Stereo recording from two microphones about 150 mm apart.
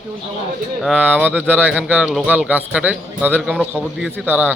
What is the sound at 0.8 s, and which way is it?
A man's voice, 5° right (ahead or behind).